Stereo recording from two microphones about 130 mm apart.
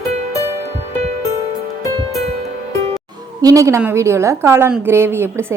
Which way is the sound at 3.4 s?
25° right (ahead or behind).